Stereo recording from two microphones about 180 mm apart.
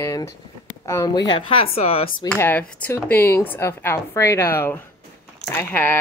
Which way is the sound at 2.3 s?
10° left (ahead or behind).